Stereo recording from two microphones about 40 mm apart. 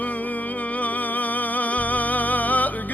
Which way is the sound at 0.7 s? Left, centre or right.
Left.